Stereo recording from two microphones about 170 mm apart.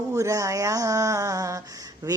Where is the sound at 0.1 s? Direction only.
20° right (ahead or behind).